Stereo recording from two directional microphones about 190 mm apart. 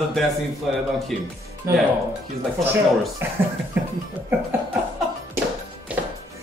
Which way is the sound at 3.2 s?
10° right (ahead or behind).